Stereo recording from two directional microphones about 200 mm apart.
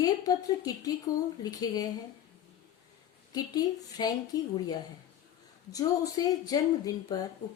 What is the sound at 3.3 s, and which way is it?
Speech, 20° left (ahead or behind).